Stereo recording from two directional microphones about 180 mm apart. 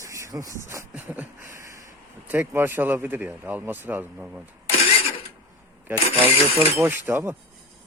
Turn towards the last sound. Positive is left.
turn(degrees=-15)  # may be behind; listen again after turning